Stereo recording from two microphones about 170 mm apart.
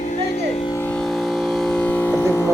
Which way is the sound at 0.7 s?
10° left (ahead or behind).